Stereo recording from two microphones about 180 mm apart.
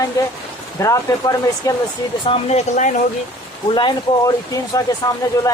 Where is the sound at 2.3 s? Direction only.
35° left (ahead or behind).